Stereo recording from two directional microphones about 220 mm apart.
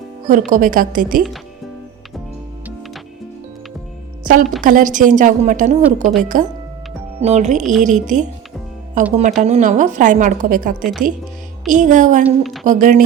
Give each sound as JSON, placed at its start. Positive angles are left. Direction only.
{"t": 0.3, "sound": "a woman's voice", "side_deg": -35}
{"t": 4.6, "sound": "a woman's voice", "side_deg": -35}
{"t": 7.6, "sound": "speech", "side_deg": 0}
{"t": 7.9, "sound": "a woman's voice", "side_deg": -35}
{"t": 12.2, "sound": "speech", "side_deg": 0}
{"t": 12.6, "sound": "a woman's voice", "side_deg": -35}